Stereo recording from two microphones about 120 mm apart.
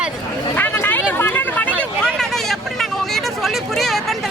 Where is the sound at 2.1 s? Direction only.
5° left (ahead or behind).